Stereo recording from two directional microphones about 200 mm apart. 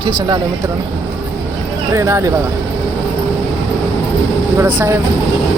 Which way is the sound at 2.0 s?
15° right (ahead or behind).